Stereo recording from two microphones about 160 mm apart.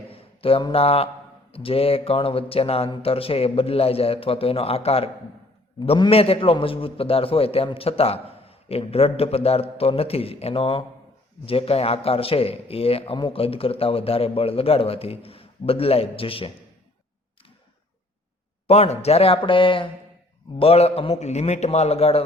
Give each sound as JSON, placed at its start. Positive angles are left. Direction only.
{"t": 0.1, "sound": "a man's voice", "side_deg": 35}
{"t": 18.7, "sound": "a man's voice", "side_deg": 40}